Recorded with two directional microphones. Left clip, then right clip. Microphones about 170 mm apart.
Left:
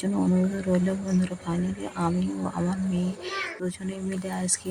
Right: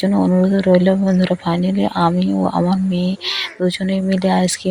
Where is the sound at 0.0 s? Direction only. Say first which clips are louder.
Right 10 dB; 20° right (ahead or behind).